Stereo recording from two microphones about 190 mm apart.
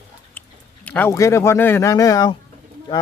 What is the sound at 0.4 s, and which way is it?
Chewing, 10° left (ahead or behind).